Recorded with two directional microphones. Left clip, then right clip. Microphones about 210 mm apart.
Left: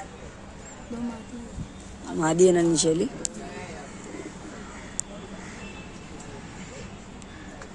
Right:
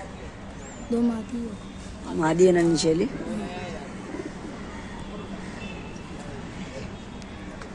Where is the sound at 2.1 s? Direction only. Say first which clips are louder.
Even; 20° left (ahead or behind).